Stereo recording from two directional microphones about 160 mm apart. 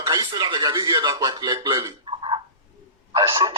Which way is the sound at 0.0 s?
30° right (ahead or behind).